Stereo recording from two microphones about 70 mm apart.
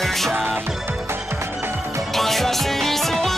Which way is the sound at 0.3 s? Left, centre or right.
Right.